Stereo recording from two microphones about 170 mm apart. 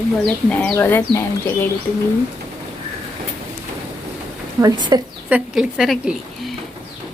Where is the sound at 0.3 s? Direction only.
10° left (ahead or behind).